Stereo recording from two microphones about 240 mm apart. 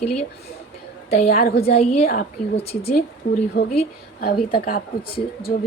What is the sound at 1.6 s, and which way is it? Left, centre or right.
Speech, left.